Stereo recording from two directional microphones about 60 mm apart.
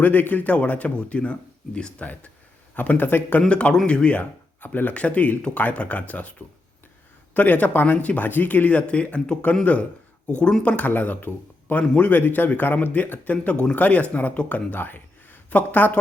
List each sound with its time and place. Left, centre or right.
0.0 s speech: left
3.5 s speech: centre
7.3 s speech: left